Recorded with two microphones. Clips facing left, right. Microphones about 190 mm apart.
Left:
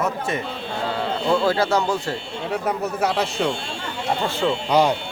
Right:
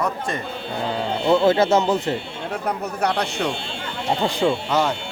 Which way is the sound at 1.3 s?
20° right (ahead or behind).